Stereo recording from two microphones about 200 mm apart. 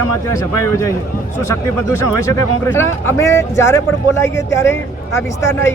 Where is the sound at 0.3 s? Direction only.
15° left (ahead or behind).